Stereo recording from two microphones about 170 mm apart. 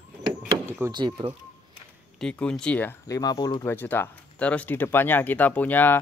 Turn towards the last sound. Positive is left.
turn(degrees=10)  # may be behind; listen again after turning